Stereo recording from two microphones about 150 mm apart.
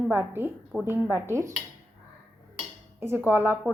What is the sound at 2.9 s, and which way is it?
Speech, 15° right (ahead or behind).